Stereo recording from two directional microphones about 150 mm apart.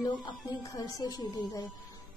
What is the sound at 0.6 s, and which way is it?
A woman's voice, 25° left (ahead or behind).